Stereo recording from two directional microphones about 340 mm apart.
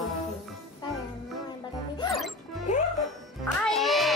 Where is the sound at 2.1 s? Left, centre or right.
Centre.